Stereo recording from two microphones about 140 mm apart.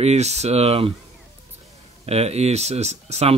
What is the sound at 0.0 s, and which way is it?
Speech, 50° right (ahead or behind).